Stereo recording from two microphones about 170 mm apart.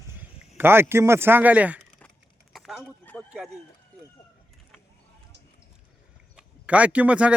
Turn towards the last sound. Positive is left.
turn(degrees=-10)  # may be behind; listen again after turning